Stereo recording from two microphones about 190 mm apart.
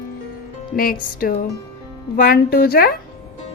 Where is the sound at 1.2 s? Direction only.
50° left (ahead or behind).